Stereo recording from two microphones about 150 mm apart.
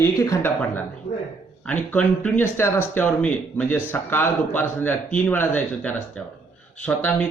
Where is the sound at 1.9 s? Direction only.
10° left (ahead or behind).